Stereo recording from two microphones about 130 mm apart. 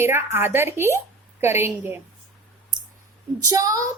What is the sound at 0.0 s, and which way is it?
A woman's voice, 20° right (ahead or behind).